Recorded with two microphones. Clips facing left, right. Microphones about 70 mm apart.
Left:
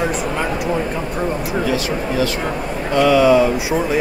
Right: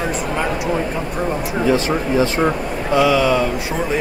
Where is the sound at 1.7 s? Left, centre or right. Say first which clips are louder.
Right 3 dB; right.